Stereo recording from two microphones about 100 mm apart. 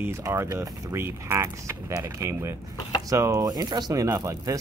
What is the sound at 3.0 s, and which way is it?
Chopping, 30° right (ahead or behind).